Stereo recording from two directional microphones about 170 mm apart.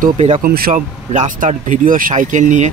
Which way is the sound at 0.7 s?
45° right (ahead or behind).